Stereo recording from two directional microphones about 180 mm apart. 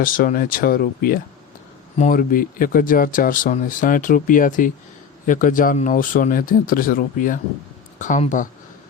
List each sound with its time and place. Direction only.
0.0 s speech: 50° left (ahead or behind)